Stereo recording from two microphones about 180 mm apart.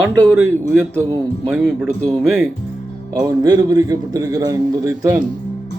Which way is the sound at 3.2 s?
20° right (ahead or behind).